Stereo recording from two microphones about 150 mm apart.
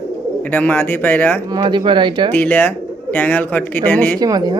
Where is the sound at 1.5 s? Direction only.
30° right (ahead or behind).